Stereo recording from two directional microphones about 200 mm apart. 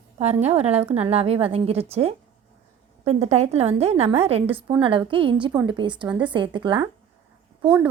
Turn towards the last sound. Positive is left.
turn(degrees=-25)  # may be behind; listen again after turning